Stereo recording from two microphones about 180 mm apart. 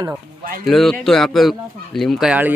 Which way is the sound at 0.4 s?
50° right (ahead or behind).